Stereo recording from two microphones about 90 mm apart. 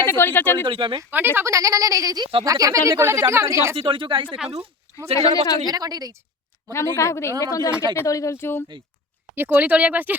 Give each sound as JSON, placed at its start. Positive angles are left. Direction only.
{"t": 0.0, "sound": "speech", "side_deg": 25}
{"t": 0.6, "sound": "speech", "side_deg": -70}
{"t": 1.1, "sound": "speech", "side_deg": -25}
{"t": 1.5, "sound": "speech", "side_deg": -40}
{"t": 3.8, "sound": "speech", "side_deg": -70}
{"t": 5.1, "sound": "speech", "side_deg": 45}
{"t": 5.6, "sound": "a woman's voice", "side_deg": -45}
{"t": 6.7, "sound": "a woman's voice", "side_deg": 30}
{"t": 9.3, "sound": "speech", "side_deg": -25}